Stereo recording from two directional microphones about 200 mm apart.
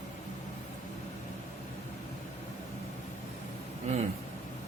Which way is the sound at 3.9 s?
35° right (ahead or behind).